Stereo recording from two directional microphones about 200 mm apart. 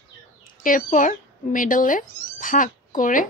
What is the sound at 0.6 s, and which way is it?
Speech, 40° left (ahead or behind).